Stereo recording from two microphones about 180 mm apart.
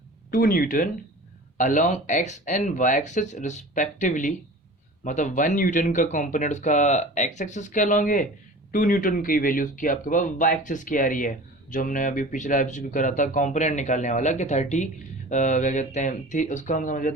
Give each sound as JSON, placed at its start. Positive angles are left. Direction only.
{"t": 0.3, "sound": "speech", "side_deg": 50}